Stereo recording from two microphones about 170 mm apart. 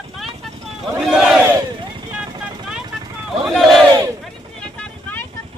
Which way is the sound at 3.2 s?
Centre (ahead or behind).